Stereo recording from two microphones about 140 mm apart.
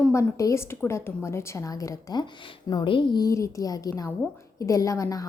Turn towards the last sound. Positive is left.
turn(degrees=25)  # may be behind; listen again after turning